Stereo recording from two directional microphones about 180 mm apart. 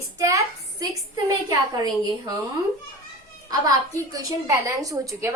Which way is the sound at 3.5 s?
20° right (ahead or behind).